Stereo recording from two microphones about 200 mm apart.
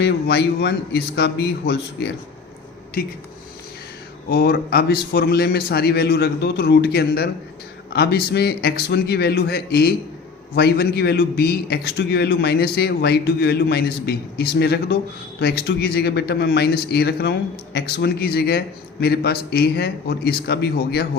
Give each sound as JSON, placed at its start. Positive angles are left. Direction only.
{"t": 0.0, "sound": "speech", "side_deg": 55}
{"t": 4.3, "sound": "a man's voice", "side_deg": 50}